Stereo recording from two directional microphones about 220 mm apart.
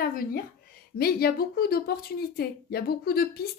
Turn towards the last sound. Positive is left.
turn(degrees=45)  # may be behind; listen again after turning